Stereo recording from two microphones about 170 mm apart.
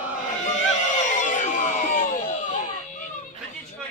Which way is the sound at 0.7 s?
45° left (ahead or behind).